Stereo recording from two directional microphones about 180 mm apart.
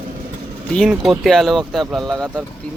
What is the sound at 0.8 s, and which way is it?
Speech, centre (ahead or behind).